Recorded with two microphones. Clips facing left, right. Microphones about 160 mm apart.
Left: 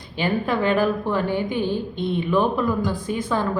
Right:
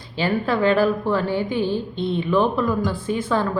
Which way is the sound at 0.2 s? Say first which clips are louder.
Right 2 dB; 15° left (ahead or behind).